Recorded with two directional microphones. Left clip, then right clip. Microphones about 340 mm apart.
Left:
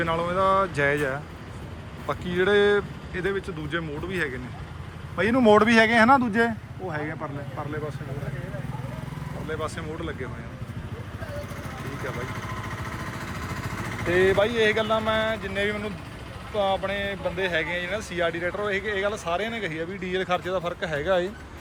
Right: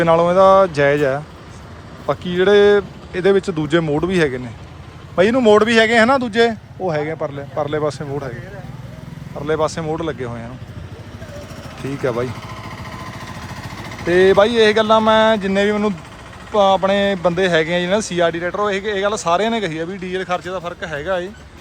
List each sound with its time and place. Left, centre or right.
0.0 s speech: centre
9.6 s speech: centre
13.5 s vehicle: right
14.1 s speech: centre